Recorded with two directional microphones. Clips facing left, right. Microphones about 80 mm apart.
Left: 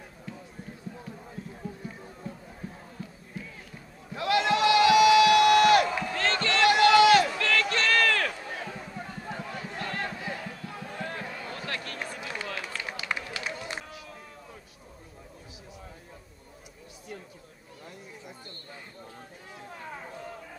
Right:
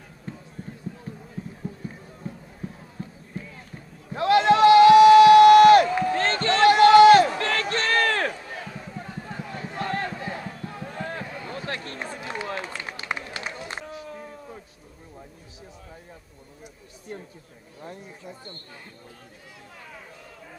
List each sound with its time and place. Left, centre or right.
4.1 s crowd: right
11.6 s run: right